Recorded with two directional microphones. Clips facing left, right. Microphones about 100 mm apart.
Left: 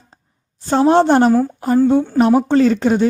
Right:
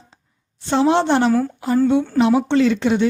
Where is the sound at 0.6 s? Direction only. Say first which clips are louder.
Left 4 dB; 40° left (ahead or behind).